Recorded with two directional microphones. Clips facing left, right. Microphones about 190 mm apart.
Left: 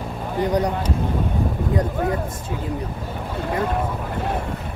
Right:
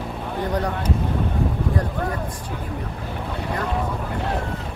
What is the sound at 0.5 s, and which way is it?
Speech, 15° left (ahead or behind).